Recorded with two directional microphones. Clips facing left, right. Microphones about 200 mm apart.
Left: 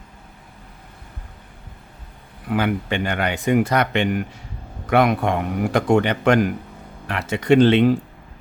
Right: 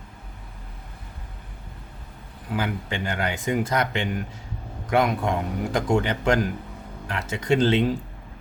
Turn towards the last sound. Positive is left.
turn(degrees=65)  # may be behind; listen again after turning